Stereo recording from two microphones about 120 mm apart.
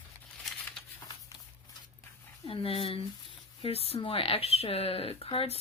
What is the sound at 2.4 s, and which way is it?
Speech, 50° left (ahead or behind).